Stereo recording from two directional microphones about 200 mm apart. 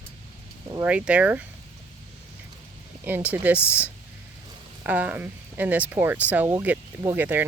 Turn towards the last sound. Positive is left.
turn(degrees=-10)  # may be behind; listen again after turning